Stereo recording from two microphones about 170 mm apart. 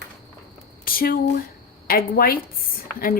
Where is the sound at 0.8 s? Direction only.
60° left (ahead or behind).